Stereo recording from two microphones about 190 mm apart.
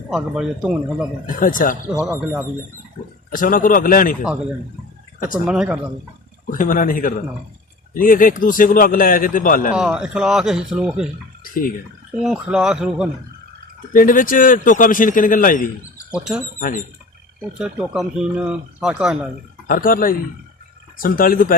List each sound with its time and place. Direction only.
0.1 s speech: centre (ahead or behind)
1.3 s a man's voice: 45° left (ahead or behind)
2.0 s speech: 10° right (ahead or behind)
3.2 s a man's voice: 45° left (ahead or behind)
5.5 s speech: 5° right (ahead or behind)
6.5 s a man's voice: 45° left (ahead or behind)
9.7 s speech: 5° right (ahead or behind)
12.2 s speech: 5° right (ahead or behind)
13.9 s a man's voice: 45° left (ahead or behind)
16.1 s speech: 5° right (ahead or behind)
16.6 s a man's voice: 45° left (ahead or behind)
17.6 s speech: 5° right (ahead or behind)
19.6 s a man's voice: 45° left (ahead or behind)